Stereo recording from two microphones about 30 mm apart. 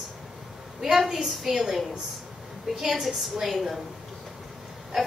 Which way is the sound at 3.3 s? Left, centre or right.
Centre.